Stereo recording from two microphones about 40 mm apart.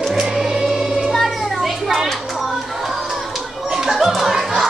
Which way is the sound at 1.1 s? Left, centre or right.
Centre.